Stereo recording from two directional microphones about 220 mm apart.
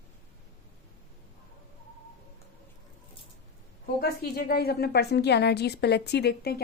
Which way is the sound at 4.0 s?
45° left (ahead or behind).